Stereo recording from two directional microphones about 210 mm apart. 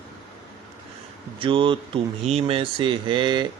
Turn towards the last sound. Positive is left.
turn(degrees=-20)  # may be behind; listen again after turning